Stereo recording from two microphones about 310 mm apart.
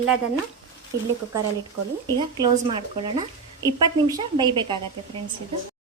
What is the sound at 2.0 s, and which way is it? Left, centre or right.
A woman's voice, centre.